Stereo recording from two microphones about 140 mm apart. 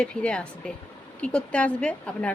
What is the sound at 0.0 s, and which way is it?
A woman's voice, 10° left (ahead or behind).